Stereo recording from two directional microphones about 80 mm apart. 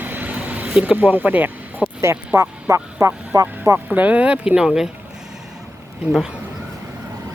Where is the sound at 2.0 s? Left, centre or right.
Right.